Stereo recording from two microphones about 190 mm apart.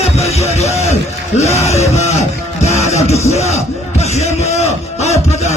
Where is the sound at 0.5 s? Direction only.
35° left (ahead or behind).